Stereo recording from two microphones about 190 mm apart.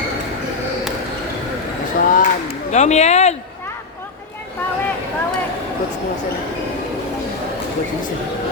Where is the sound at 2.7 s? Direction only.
35° left (ahead or behind).